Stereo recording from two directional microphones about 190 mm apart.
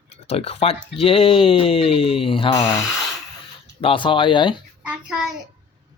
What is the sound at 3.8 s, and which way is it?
Speech, 25° left (ahead or behind).